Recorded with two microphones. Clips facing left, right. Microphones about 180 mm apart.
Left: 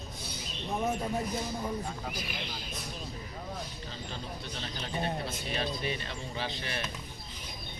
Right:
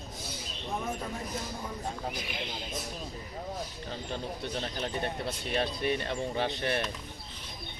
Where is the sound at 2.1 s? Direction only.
20° right (ahead or behind).